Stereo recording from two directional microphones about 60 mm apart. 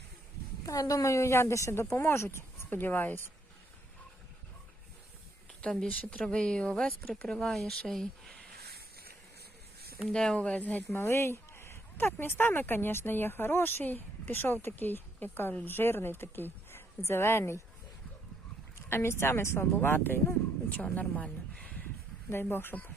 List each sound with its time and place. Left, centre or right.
0.6 s a woman's voice: left
2.7 s speech: left
5.8 s speech: centre
10.1 s speech: centre
10.8 s speech: left
18.9 s speech: left
20.7 s speech: left
22.3 s speech: left